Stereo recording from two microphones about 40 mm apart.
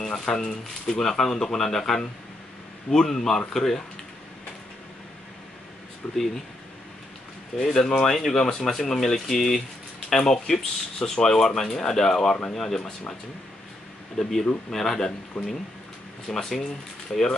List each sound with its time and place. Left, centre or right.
0.0 s speech: centre
6.1 s speech: centre
7.5 s speech: centre
14.2 s speech: centre
15.3 s speech: left
16.3 s speech: centre